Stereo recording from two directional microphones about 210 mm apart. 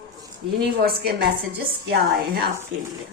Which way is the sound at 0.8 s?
50° right (ahead or behind).